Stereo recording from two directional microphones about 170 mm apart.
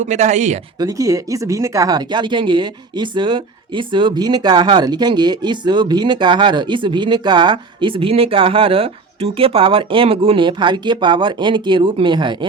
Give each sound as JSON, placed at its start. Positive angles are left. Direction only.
{"t": 0.0, "sound": "speech", "side_deg": -45}
{"t": 0.8, "sound": "speech", "side_deg": -20}